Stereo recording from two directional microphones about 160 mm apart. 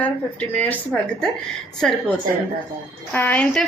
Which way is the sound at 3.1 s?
10° left (ahead or behind).